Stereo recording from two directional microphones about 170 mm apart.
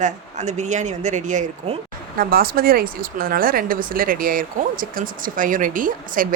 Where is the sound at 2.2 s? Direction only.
60° right (ahead or behind).